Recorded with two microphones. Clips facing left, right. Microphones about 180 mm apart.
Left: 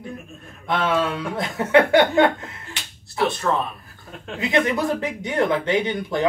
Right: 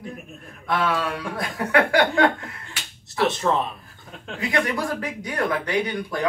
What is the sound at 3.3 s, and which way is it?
Speech, 20° right (ahead or behind).